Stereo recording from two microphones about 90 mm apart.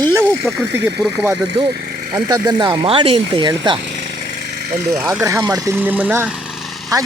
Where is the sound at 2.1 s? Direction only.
45° right (ahead or behind).